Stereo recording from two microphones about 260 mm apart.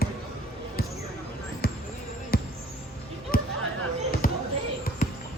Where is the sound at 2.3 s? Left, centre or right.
Left.